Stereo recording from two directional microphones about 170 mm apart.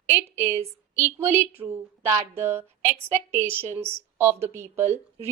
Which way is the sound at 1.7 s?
15° right (ahead or behind).